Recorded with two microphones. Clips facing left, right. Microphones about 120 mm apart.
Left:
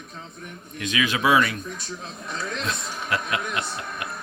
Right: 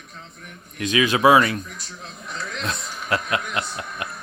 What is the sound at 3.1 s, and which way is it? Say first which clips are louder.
Speech: right 3 dB; 30° right (ahead or behind).